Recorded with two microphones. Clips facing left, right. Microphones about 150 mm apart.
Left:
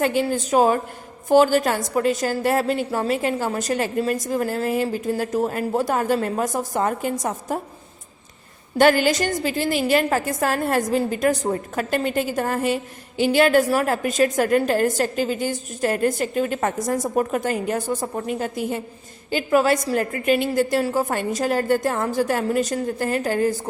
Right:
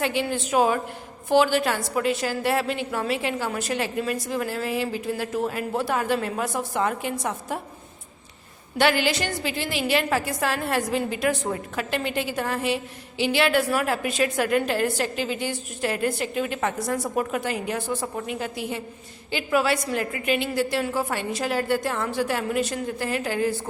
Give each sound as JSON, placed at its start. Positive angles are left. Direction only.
{"t": 0.0, "sound": "a woman's voice", "side_deg": 45}
{"t": 8.8, "sound": "a woman's voice", "side_deg": 45}